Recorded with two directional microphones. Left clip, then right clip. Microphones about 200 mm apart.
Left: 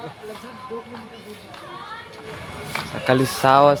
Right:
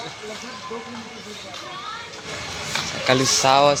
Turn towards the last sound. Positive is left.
turn(degrees=30)  # may be behind; listen again after turning